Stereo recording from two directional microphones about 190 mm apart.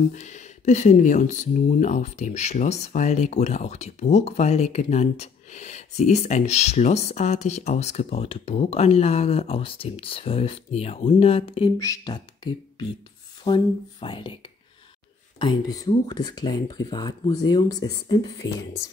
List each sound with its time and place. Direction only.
0.1 s speech: 40° left (ahead or behind)
11.8 s speech: 20° left (ahead or behind)
13.4 s speech: 25° left (ahead or behind)